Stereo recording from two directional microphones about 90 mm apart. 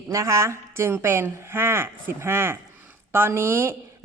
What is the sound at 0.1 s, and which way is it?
Speech, 35° right (ahead or behind).